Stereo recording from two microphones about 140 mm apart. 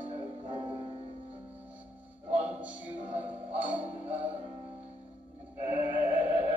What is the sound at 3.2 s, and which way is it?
Music, 10° right (ahead or behind).